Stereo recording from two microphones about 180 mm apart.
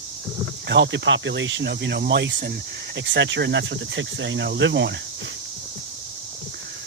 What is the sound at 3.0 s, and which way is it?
Speech, 80° right.